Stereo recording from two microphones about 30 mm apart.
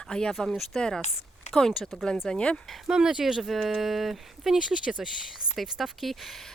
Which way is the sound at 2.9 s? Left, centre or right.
Right.